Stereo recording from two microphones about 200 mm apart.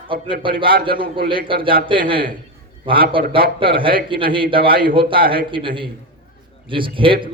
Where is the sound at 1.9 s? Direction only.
25° right (ahead or behind).